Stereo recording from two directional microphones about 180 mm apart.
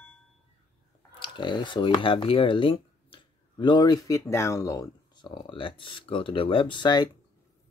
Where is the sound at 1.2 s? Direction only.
25° left (ahead or behind).